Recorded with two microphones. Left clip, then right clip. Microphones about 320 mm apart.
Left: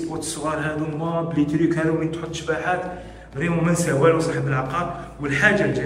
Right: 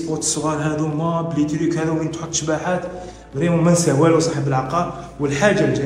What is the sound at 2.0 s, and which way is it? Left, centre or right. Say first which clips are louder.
A man's voice: right 3 dB; centre.